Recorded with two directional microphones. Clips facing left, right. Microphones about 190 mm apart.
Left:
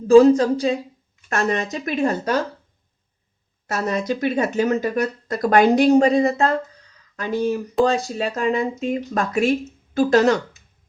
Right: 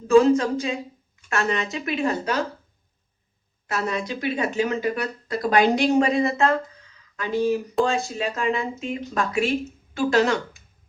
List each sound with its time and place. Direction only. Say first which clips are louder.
0.1 s speech: left 5 dB; 35° left (ahead or behind)
3.7 s speech: left 4 dB; 40° left (ahead or behind)